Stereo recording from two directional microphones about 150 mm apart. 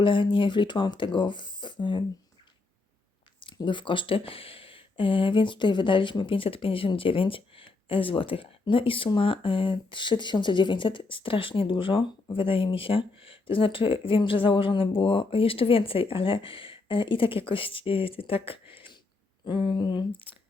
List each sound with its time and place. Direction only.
0.0 s speech: 35° left (ahead or behind)
3.4 s speech: 30° left (ahead or behind)